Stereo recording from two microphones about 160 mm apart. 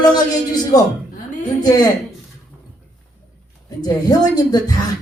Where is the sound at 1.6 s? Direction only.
25° left (ahead or behind).